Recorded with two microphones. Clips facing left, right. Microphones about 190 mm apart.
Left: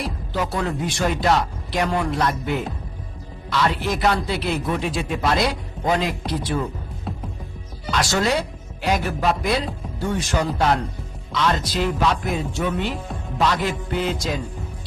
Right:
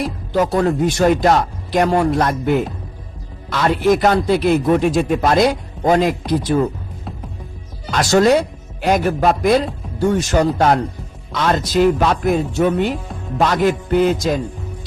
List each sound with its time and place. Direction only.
0.3 s a man's voice: 45° right (ahead or behind)
7.9 s a man's voice: 45° right (ahead or behind)